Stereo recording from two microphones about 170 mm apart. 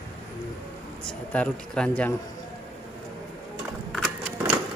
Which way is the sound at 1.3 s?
5° left (ahead or behind).